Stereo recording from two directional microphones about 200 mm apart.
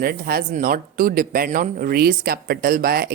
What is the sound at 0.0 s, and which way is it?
Speech, 50° right (ahead or behind).